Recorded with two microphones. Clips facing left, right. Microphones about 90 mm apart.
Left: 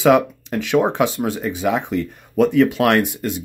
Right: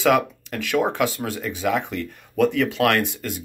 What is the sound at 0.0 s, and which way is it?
Speech, 20° left (ahead or behind).